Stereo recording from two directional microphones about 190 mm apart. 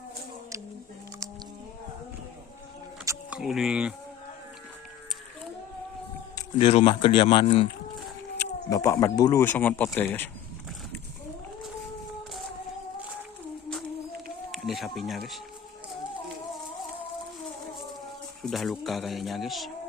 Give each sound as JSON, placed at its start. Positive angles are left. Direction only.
{"t": 3.1, "sound": "speech", "side_deg": -5}
{"t": 6.3, "sound": "speech", "side_deg": 30}
{"t": 8.7, "sound": "speech", "side_deg": 15}
{"t": 14.5, "sound": "a sound", "side_deg": 0}
{"t": 18.4, "sound": "speech", "side_deg": 0}